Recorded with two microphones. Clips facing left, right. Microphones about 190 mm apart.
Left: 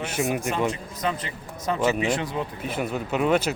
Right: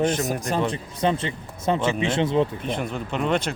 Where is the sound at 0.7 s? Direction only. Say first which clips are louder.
Right 4 dB; 30° right (ahead or behind).